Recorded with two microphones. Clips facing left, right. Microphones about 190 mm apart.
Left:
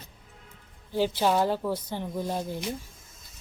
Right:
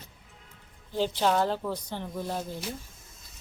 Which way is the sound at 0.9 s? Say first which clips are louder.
Left 1 dB; 10° left (ahead or behind).